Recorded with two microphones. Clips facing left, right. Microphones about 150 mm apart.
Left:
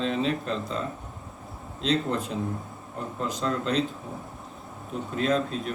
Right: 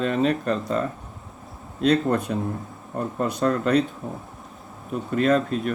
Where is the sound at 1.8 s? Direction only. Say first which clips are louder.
Right 6 dB; 55° right (ahead or behind).